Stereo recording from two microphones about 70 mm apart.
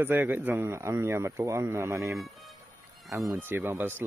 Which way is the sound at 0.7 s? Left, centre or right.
Right.